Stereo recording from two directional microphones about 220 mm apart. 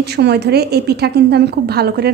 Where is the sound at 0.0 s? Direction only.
50° right (ahead or behind).